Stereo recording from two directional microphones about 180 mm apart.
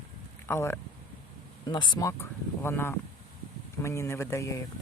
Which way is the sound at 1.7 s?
25° left (ahead or behind).